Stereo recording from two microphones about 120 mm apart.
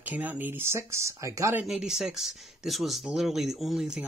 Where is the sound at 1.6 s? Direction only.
5° right (ahead or behind).